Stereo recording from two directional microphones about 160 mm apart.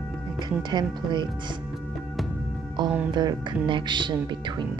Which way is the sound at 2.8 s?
25° right (ahead or behind).